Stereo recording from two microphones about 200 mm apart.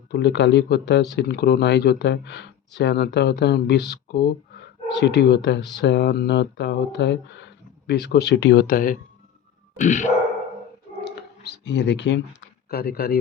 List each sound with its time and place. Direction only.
0.1 s speech: 60° left (ahead or behind); by 9.0 s 45° left (ahead or behind)
9.8 s dog: 40° left (ahead or behind)
11.0 s a sound: 55° left (ahead or behind)
12.7 s speech: 50° left (ahead or behind)